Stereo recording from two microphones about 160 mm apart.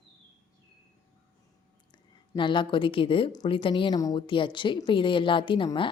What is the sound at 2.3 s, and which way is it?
A woman's voice, 30° left (ahead or behind).